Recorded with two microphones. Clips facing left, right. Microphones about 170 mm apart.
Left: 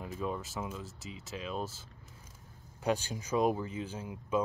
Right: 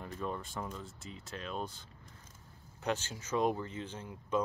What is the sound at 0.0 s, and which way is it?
Speech, 5° left (ahead or behind).